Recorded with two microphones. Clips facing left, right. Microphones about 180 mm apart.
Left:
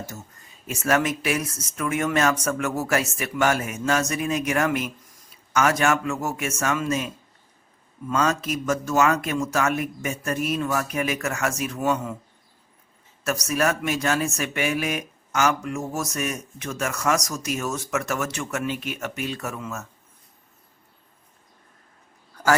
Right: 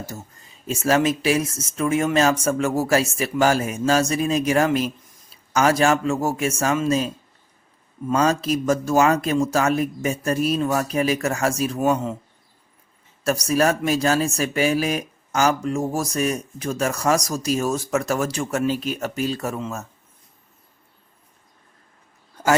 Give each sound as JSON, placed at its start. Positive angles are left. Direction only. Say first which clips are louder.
{"t": 0.0, "sound": "speech", "louder": "right 2 dB", "side_deg": -30}
{"t": 13.2, "sound": "speech", "louder": "right 4 dB", "side_deg": -30}